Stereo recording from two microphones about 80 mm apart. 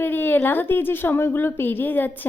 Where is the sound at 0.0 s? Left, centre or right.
Left.